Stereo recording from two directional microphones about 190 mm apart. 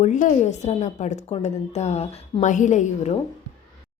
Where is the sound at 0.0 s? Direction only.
40° left (ahead or behind).